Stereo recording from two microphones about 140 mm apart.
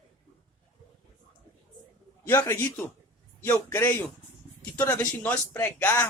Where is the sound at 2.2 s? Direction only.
20° left (ahead or behind).